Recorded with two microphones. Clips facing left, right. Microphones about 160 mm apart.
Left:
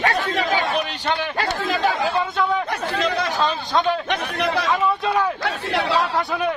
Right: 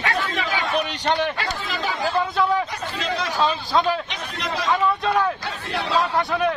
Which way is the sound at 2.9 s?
55° left (ahead or behind).